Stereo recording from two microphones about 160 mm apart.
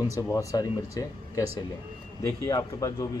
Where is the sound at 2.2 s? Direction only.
15° left (ahead or behind).